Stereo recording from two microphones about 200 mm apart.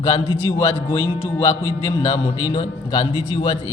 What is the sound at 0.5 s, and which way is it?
A man's voice, 10° left (ahead or behind).